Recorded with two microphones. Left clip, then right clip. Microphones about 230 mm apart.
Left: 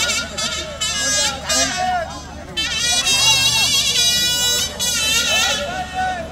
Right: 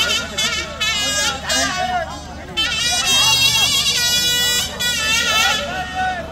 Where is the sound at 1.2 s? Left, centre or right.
Centre.